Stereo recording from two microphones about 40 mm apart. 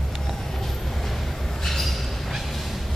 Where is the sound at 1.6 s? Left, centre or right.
Centre.